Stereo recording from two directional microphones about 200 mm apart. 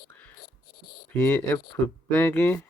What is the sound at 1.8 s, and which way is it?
Speech, 10° left (ahead or behind).